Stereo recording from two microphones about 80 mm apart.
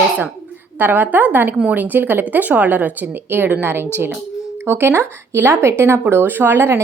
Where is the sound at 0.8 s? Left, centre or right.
Right.